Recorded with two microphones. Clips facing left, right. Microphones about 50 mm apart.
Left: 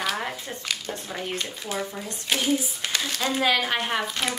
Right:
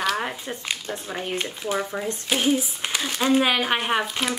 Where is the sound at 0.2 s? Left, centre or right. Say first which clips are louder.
Right 2 dB; centre.